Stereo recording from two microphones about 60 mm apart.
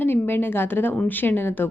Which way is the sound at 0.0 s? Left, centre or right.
Left.